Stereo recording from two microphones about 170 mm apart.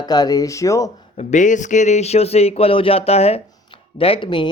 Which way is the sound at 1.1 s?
45° left (ahead or behind).